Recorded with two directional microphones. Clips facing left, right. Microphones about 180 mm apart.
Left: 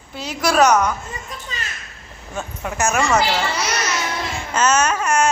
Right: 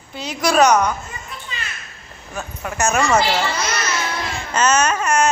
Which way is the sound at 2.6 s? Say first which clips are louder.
Right 1 dB; 10° left (ahead or behind).